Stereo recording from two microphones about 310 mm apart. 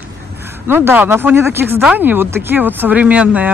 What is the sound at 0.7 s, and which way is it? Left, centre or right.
Speech, centre.